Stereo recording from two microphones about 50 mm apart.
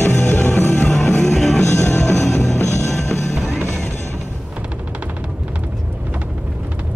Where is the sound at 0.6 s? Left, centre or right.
Left.